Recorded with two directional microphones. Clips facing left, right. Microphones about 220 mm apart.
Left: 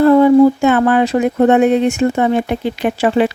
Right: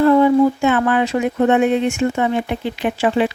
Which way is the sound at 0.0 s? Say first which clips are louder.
Left 4 dB; 40° left (ahead or behind).